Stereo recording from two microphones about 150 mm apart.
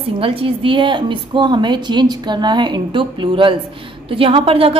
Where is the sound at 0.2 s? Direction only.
35° right (ahead or behind).